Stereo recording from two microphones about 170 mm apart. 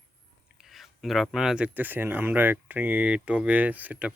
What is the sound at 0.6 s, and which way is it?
Speech, centre (ahead or behind).